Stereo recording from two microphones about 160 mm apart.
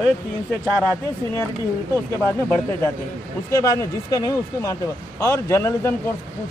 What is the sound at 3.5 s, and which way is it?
Speech, 20° left (ahead or behind).